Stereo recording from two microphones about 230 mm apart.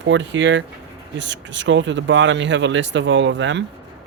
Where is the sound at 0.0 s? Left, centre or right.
Right.